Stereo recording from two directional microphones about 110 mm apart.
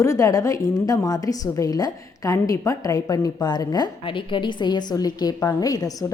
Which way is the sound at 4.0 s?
50° left (ahead or behind).